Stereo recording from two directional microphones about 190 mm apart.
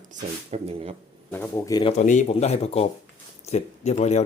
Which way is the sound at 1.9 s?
40° left (ahead or behind).